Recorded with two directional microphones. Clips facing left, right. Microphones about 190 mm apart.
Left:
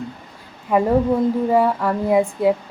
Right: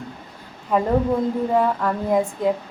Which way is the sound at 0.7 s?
5° left (ahead or behind).